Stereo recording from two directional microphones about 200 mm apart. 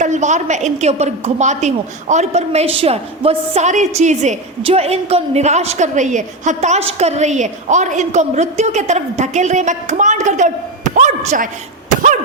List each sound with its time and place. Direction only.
0.0 s a woman's voice: 35° right (ahead or behind)